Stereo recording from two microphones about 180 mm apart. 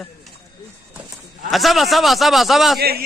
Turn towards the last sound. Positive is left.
turn(degrees=-60)  # may be behind; listen again after turning